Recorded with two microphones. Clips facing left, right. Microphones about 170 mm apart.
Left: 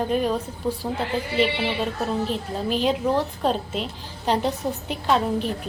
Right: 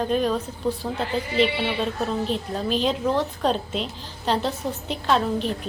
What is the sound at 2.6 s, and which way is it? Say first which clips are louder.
A woman's voice: left 1 dB; 10° left (ahead or behind).